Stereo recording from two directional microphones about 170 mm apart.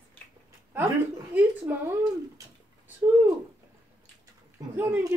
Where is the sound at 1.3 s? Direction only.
15° right (ahead or behind).